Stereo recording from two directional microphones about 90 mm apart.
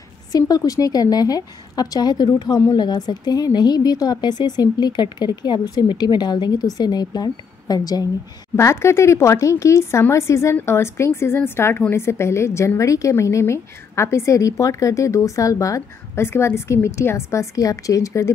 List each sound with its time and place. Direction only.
0.3 s speech: 40° left (ahead or behind)
8.5 s a woman's voice: 30° left (ahead or behind)